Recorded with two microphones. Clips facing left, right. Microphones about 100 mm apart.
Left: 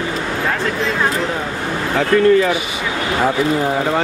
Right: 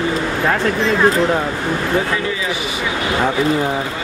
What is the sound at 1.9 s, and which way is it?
Speech, 60° left (ahead or behind).